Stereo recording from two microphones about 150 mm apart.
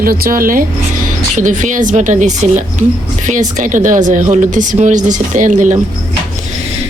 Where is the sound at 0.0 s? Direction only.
70° right (ahead or behind).